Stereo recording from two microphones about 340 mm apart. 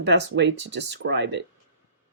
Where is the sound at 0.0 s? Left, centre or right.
Right.